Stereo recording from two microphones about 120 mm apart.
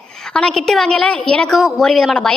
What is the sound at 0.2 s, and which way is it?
A woman's voice, 5° left (ahead or behind).